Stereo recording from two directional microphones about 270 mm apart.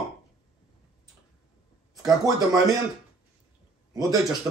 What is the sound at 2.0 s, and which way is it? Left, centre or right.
Speech, centre.